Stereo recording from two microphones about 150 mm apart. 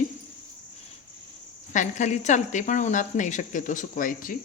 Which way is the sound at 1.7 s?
55° left (ahead or behind).